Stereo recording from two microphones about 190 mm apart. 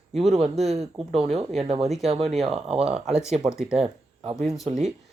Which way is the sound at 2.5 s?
30° right (ahead or behind).